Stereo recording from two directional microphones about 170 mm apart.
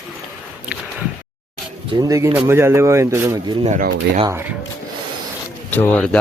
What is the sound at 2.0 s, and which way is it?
Speech, 20° right (ahead or behind).